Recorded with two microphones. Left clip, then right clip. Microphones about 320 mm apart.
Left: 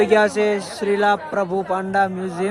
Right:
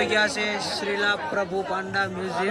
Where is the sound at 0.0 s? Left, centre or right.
Centre.